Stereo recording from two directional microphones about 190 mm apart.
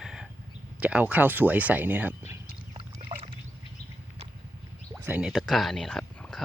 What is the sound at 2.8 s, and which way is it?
Rowboat, 25° right (ahead or behind).